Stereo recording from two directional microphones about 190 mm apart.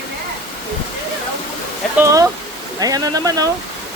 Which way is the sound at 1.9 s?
15° right (ahead or behind).